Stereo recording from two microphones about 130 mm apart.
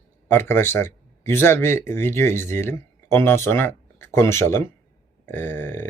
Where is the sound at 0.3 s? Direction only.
15° left (ahead or behind).